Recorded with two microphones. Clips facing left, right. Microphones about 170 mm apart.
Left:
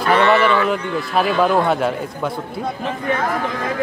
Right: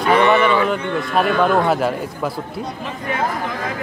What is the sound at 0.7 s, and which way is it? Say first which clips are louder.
Speech: even; centre (ahead or behind).